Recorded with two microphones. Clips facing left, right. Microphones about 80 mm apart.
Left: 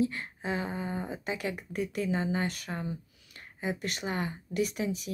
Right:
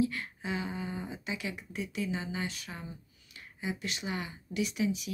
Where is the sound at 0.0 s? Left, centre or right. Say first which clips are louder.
Left 1 dB; left.